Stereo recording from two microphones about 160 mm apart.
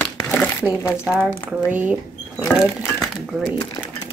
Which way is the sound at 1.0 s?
10° right (ahead or behind).